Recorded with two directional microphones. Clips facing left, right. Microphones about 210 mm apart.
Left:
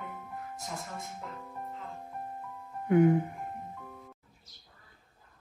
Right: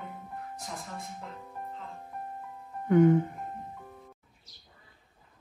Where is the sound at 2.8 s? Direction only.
45° right (ahead or behind).